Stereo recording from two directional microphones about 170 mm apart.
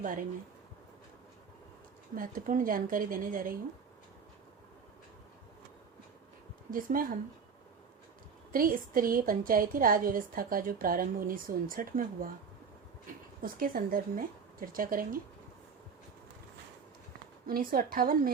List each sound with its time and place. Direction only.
0.0 s speech: 50° right (ahead or behind)
2.1 s speech: 50° right (ahead or behind)
6.7 s a woman's voice: 55° right (ahead or behind)
8.5 s a woman's voice: 55° right (ahead or behind)
13.4 s a woman's voice: 55° right (ahead or behind)
17.4 s a woman's voice: 60° right (ahead or behind)